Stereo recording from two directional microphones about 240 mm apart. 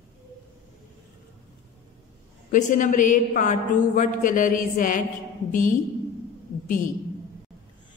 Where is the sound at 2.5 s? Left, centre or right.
Left.